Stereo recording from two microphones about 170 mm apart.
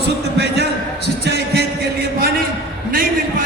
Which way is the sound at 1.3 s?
80° right.